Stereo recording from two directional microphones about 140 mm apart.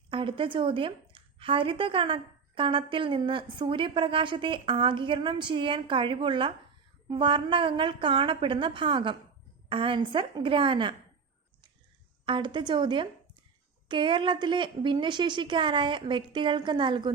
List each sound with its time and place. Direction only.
0.1 s a woman's voice: 40° right (ahead or behind)
12.2 s a woman's voice: 35° right (ahead or behind)